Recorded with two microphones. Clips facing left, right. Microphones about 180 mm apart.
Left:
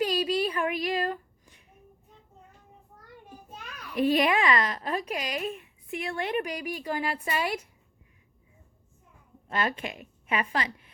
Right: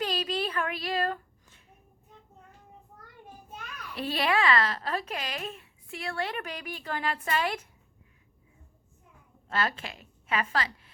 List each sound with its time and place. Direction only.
0.0 s a sound: 10° left (ahead or behind)
3.9 s a woman's voice: 15° left (ahead or behind)
9.5 s a woman's voice: 15° left (ahead or behind)